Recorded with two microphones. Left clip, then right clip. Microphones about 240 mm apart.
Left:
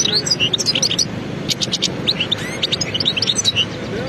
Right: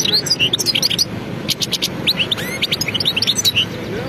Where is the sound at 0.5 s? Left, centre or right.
Right.